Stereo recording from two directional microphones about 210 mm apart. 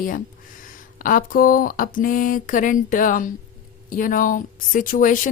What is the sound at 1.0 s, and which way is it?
A woman's voice, 40° left (ahead or behind).